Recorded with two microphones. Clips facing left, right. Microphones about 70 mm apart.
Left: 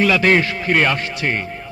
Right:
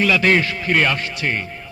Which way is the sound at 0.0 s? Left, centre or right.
Left.